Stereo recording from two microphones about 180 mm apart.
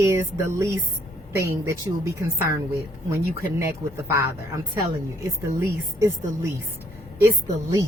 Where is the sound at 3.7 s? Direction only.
15° right (ahead or behind).